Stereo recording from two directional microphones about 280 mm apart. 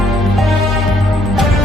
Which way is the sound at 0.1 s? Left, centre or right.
Centre.